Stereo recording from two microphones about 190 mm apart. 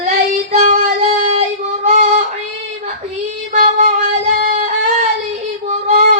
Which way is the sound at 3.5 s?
40° right (ahead or behind).